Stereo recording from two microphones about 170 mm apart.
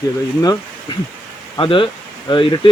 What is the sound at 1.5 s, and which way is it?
Speech, 30° left (ahead or behind).